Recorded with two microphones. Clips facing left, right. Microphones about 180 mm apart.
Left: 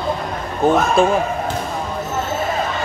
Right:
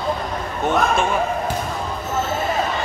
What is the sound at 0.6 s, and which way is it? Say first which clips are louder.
Speech: left 6 dB; 35° left (ahead or behind).